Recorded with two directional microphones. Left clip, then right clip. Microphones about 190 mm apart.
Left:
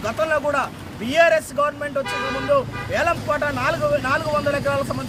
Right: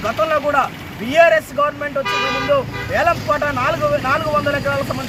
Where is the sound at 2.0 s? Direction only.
45° left (ahead or behind).